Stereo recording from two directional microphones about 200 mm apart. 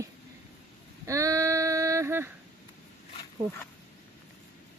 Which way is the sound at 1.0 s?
15° right (ahead or behind).